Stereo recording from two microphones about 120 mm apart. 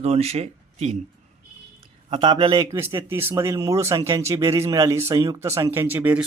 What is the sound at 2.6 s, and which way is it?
Speech, 25° right (ahead or behind).